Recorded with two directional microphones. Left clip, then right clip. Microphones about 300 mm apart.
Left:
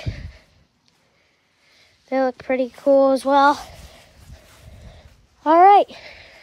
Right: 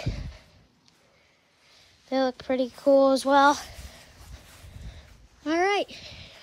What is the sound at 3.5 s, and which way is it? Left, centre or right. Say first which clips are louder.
Speech: left 4 dB; centre.